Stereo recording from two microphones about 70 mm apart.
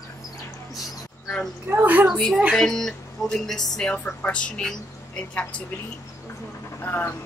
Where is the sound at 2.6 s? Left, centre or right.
Centre.